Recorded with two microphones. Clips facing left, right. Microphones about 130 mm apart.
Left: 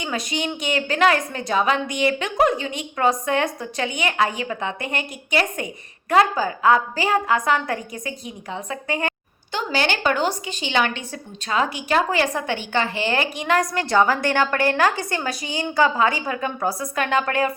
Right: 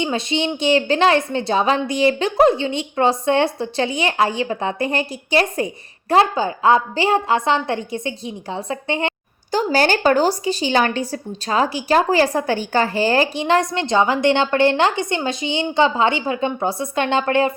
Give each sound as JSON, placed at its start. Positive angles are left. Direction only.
{"t": 0.0, "sound": "a woman's voice", "side_deg": -30}
{"t": 9.5, "sound": "a woman's voice", "side_deg": -40}